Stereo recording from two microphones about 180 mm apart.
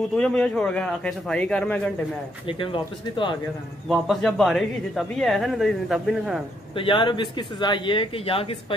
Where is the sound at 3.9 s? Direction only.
Centre (ahead or behind).